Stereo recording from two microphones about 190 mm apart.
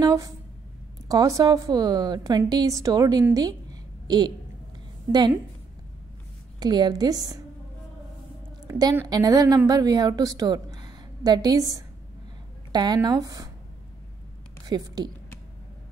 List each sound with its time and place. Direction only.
0.0 s a woman's voice: 15° right (ahead or behind)
6.6 s a woman's voice: 20° right (ahead or behind)
8.6 s a woman's voice: 20° right (ahead or behind)
14.7 s a woman's voice: 20° right (ahead or behind)